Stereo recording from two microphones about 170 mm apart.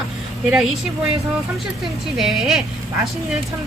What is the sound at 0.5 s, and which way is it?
Speech, centre (ahead or behind).